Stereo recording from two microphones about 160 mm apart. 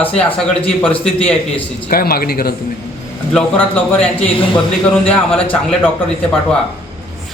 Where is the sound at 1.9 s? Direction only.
70° left (ahead or behind).